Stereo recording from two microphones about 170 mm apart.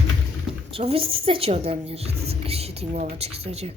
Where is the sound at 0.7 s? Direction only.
35° right (ahead or behind).